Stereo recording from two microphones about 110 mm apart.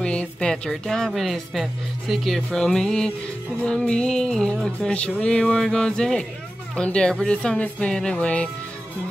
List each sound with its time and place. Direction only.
0.0 s a woman's voice: 10° left (ahead or behind)